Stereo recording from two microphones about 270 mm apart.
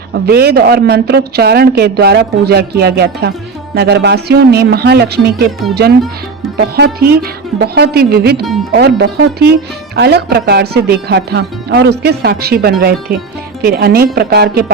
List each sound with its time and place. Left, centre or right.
0.1 s speech: right
6.6 s speech: right